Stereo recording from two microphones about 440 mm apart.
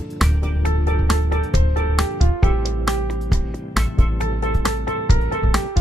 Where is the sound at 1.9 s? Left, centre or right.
Centre.